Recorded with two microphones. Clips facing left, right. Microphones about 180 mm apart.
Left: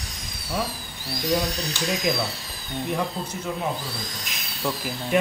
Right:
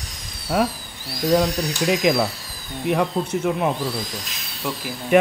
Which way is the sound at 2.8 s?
75° right (ahead or behind).